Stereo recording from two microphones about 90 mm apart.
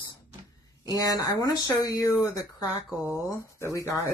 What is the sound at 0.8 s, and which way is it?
Speech, 45° left (ahead or behind).